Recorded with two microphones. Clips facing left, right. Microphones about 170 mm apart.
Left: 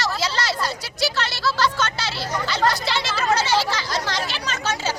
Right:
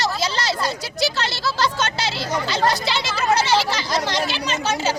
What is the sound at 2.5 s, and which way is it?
Speech, 15° right (ahead or behind).